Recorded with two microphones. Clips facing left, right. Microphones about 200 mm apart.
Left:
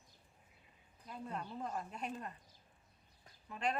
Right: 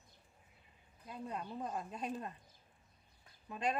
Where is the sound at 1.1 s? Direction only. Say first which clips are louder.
Right 1 dB; 15° right (ahead or behind).